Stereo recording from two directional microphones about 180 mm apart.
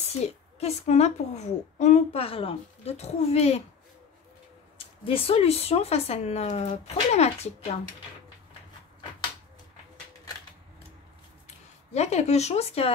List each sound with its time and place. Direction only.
0.6 s a woman's voice: 35° left (ahead or behind)
4.7 s a woman's voice: 30° left (ahead or behind)
11.4 s speech: 40° left (ahead or behind)